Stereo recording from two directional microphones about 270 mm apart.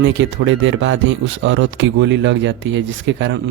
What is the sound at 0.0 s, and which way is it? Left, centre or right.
Speech, right.